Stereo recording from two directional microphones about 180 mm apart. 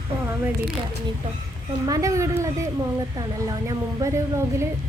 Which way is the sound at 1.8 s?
20° right (ahead or behind).